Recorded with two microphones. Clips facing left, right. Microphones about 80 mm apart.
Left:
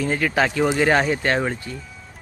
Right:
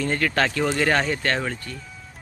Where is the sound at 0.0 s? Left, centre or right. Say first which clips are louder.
Left 2 dB; centre.